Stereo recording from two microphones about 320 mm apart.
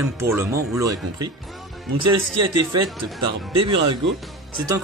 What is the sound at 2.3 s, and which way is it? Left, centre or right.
Speech, right.